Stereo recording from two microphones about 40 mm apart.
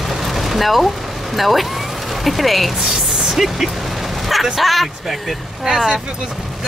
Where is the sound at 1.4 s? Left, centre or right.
Centre.